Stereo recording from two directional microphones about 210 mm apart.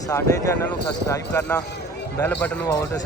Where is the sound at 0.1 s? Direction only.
15° left (ahead or behind).